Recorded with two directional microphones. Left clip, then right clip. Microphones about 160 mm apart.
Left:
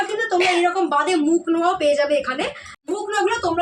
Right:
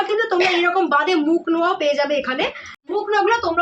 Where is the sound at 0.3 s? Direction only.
Centre (ahead or behind).